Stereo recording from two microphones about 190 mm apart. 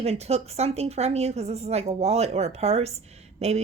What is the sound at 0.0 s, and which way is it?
A woman's voice, 35° right (ahead or behind).